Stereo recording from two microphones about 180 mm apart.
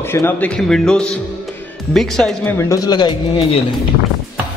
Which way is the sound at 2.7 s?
20° left (ahead or behind).